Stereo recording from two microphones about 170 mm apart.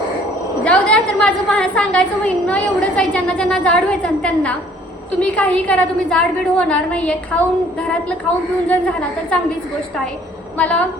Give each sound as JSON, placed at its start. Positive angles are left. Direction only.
{"t": 0.6, "sound": "a woman's voice", "side_deg": 5}
{"t": 10.6, "sound": "a woman's voice", "side_deg": 5}